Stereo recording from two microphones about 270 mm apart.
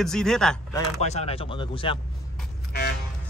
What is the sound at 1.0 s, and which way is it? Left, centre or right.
Speech, left.